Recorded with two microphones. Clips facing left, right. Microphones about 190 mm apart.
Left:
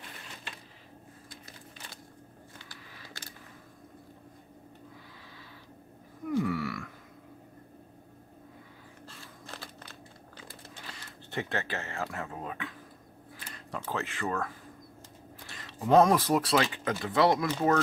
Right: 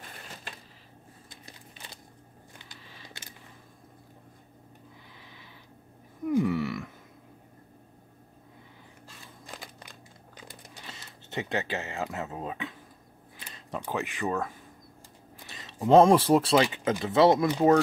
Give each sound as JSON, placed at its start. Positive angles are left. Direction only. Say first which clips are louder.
{"t": 2.7, "sound": "a sound", "louder": "even", "side_deg": -20}
{"t": 6.3, "sound": "wild animals", "louder": "right 4 dB", "side_deg": -20}
{"t": 9.5, "sound": "crumpling", "louder": "right 1 dB", "side_deg": -15}
{"t": 13.5, "sound": "speech", "louder": "right 2 dB", "side_deg": -20}